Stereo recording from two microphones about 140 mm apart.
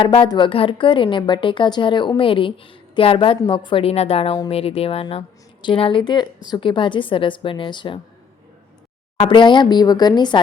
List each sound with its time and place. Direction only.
0.0 s a woman's voice: 35° left (ahead or behind)
9.2 s a woman's voice: 35° left (ahead or behind)